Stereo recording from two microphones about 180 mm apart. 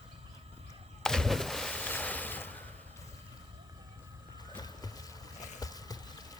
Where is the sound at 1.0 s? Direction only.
5° left (ahead or behind).